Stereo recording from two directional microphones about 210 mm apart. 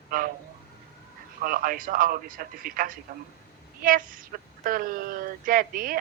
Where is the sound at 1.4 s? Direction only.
45° right (ahead or behind).